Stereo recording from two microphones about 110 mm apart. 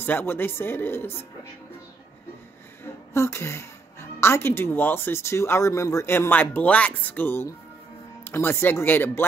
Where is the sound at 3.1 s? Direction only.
25° left (ahead or behind).